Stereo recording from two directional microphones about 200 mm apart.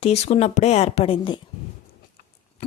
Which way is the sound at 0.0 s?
30° left (ahead or behind).